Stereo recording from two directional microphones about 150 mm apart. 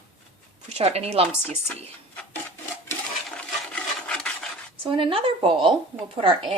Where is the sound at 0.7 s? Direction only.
45° right (ahead or behind).